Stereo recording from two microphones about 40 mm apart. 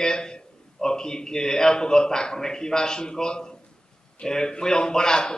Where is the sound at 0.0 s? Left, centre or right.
Centre.